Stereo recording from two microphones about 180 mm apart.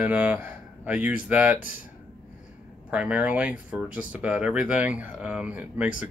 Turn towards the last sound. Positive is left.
turn(degrees=-5)  # may be behind; listen again after turning